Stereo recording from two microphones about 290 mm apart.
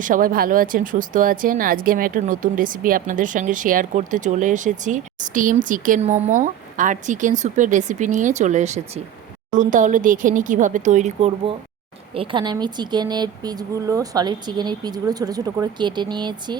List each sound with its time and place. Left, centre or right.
0.0 s speech: right